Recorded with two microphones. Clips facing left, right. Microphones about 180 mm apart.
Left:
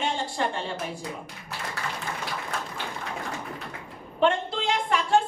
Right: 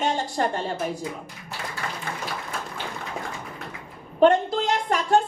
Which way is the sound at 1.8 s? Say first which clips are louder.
Right 2 dB; 60° right (ahead or behind).